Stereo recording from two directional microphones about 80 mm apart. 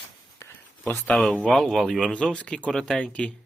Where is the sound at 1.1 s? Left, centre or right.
Centre.